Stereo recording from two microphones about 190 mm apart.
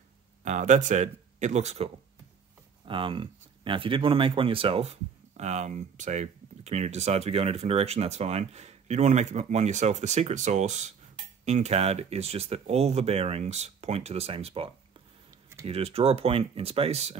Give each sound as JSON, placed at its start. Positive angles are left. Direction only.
{"t": 0.4, "sound": "speech", "side_deg": -40}